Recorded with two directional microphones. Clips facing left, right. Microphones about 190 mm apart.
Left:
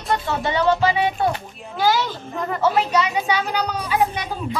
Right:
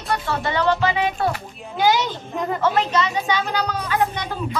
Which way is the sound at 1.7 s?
15° right (ahead or behind).